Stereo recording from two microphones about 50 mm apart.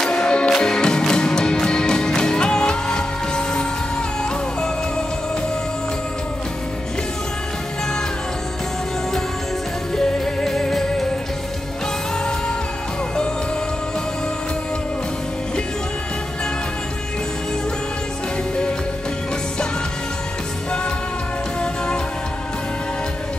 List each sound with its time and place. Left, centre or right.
0.0 s music: centre
9.9 s music: centre
21.5 s music: centre